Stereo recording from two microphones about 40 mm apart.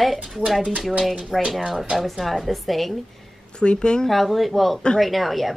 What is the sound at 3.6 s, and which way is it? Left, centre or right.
Speech, left.